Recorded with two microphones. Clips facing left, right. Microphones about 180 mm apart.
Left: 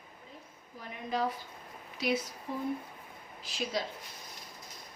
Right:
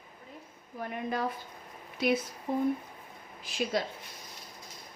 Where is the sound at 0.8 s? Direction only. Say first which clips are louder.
Right 1 dB; 55° right (ahead or behind).